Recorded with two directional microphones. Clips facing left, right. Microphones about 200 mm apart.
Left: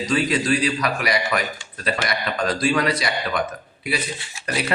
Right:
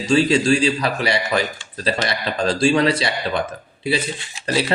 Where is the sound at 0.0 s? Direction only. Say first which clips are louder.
Right 5 dB; 30° right (ahead or behind).